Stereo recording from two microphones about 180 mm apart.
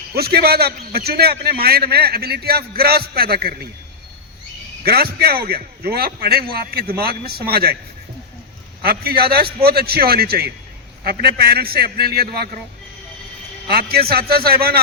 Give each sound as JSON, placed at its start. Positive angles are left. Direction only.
{"t": 0.1, "sound": "a man's voice", "side_deg": -60}
{"t": 4.8, "sound": "a man's voice", "side_deg": -55}
{"t": 8.8, "sound": "a man's voice", "side_deg": -60}
{"t": 13.7, "sound": "a man's voice", "side_deg": -60}